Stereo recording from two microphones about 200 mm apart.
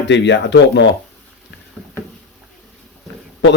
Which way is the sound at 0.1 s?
60° left (ahead or behind).